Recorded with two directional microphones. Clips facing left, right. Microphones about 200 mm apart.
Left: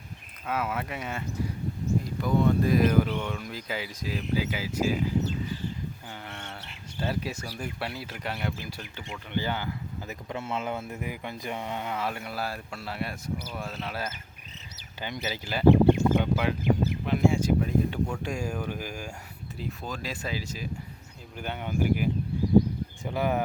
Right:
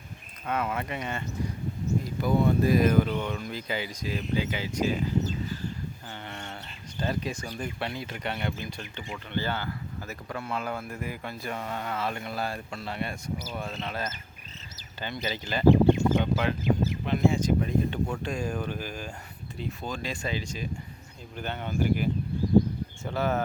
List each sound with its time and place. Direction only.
0.4 s speech: 5° left (ahead or behind)
2.2 s speech: 5° right (ahead or behind)
6.2 s bird: centre (ahead or behind)
7.0 s speech: 5° left (ahead or behind)
15.7 s a sound: 60° left (ahead or behind)
16.2 s speech: 10° left (ahead or behind)